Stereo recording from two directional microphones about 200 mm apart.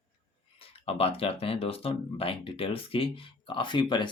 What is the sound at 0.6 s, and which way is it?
Speech, 30° left (ahead or behind).